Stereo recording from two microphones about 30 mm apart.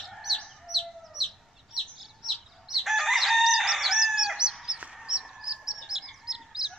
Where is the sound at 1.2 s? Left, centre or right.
Centre.